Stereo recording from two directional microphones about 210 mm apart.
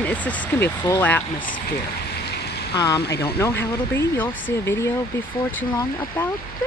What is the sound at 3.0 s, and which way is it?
Speech, 50° left (ahead or behind).